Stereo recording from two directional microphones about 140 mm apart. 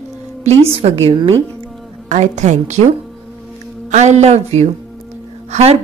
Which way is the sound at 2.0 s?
55° right (ahead or behind).